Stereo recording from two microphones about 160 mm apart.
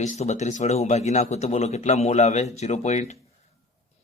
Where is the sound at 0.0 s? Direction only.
45° left (ahead or behind).